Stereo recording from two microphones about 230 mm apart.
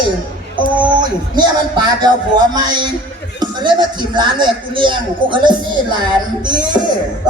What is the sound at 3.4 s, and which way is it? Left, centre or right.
A man's voice, centre.